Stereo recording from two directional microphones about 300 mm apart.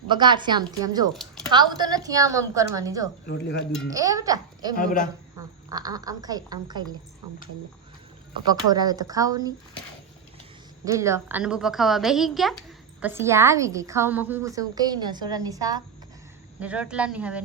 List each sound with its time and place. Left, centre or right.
0.1 s a woman's voice: centre
4.8 s speech: left
5.6 s a woman's voice: centre
8.4 s a woman's voice: centre
10.8 s a woman's voice: centre